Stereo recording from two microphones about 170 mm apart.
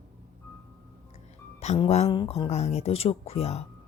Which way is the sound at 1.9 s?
40° left (ahead or behind).